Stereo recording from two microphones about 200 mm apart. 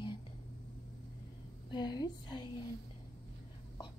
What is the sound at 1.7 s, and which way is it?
Speech, 20° left (ahead or behind).